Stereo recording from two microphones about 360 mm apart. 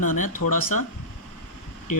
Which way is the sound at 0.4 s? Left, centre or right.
Left.